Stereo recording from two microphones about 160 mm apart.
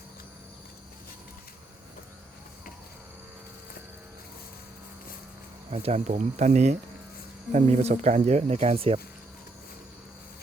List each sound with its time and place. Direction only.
5.7 s speech: 40° right (ahead or behind)